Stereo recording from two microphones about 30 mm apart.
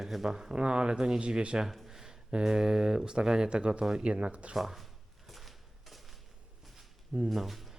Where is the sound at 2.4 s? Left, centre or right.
Right.